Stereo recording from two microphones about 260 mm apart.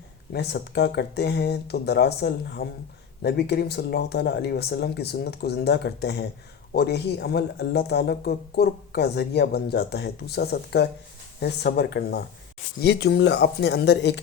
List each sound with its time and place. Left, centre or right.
0.3 s speech: left